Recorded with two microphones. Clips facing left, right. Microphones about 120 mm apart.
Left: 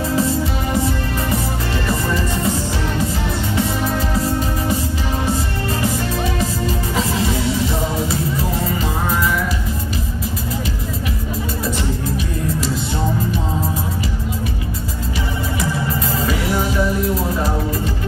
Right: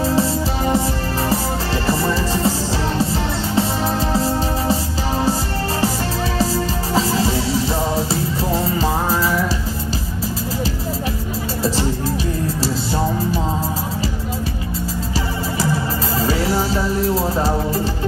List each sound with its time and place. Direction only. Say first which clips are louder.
0.0 s music: right 1 dB; 30° right (ahead or behind)
7.0 s music: right 3 dB; 30° right (ahead or behind)
16.3 s music: right 2 dB; 30° right (ahead or behind)